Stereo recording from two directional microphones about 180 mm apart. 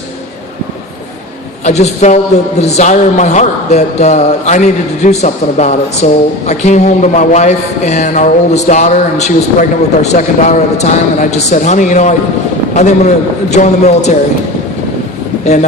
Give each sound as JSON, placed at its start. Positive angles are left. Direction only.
{"t": 1.6, "sound": "a man's voice", "side_deg": 40}